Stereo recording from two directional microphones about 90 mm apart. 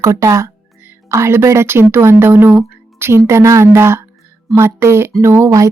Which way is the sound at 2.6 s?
25° right (ahead or behind).